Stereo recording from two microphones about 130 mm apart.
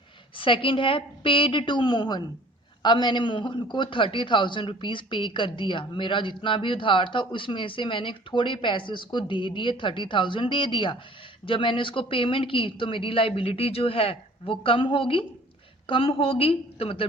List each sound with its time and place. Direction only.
0.3 s a man's voice: 40° left (ahead or behind)